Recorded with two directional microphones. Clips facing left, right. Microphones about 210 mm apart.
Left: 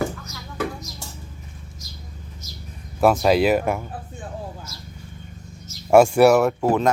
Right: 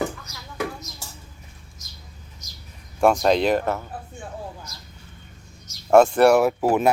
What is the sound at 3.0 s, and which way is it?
Speech, 5° left (ahead or behind).